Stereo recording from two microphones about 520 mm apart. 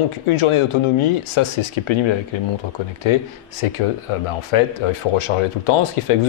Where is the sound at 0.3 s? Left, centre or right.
Left.